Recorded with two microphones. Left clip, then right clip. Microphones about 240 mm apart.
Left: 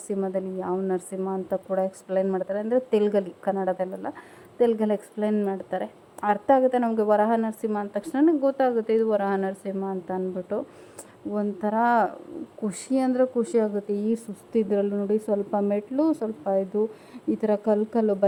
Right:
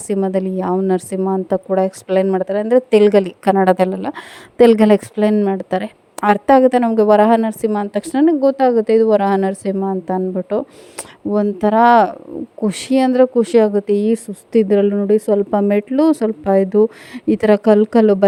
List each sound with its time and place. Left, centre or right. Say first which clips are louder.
0.1 s a woman's voice: right 10 dB; right